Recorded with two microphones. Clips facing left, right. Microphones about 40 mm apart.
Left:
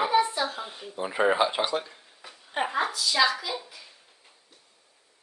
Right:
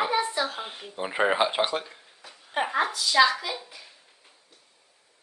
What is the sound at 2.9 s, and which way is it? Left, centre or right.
Speech, right.